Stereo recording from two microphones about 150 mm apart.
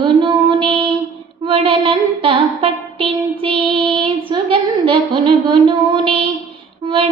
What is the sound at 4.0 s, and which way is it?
A woman's voice, 35° right (ahead or behind).